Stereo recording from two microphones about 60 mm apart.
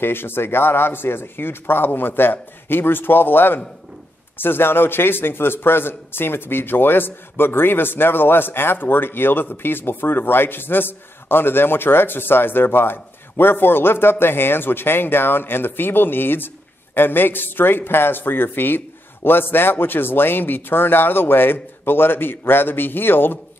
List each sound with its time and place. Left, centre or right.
0.0 s a man's voice: left